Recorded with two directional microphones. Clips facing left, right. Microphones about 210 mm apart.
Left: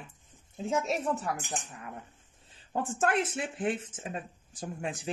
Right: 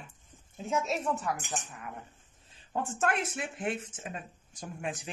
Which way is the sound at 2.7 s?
30° left (ahead or behind).